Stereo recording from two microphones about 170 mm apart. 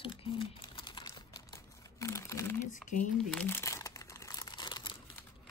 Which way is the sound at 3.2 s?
5° left (ahead or behind).